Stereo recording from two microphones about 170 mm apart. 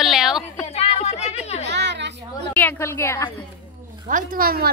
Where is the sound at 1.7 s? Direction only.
90° right.